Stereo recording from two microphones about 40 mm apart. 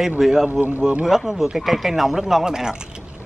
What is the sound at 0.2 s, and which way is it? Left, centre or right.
Speech, centre.